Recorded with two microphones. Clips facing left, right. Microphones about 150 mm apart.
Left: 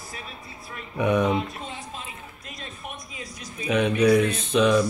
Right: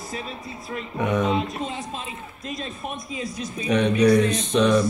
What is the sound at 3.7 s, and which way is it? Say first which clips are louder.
Mantra: right 1 dB; 5° left (ahead or behind).